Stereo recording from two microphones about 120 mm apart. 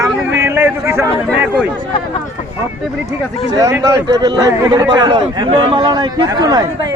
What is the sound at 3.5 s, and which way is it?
A man's voice, 30° right (ahead or behind).